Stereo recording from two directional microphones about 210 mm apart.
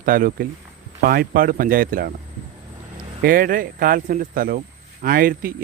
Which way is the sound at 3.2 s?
45° right (ahead or behind).